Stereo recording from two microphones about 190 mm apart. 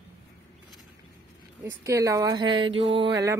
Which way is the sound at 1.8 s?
15° right (ahead or behind).